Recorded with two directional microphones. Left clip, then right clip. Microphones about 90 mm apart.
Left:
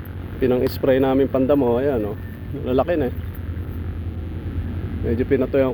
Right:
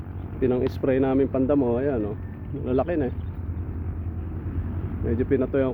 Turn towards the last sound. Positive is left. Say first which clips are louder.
# left 4 dB
turn(degrees=-25)  # may be behind; listen again after turning